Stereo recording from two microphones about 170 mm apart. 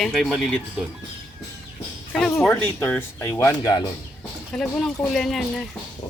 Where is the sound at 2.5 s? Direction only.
10° left (ahead or behind).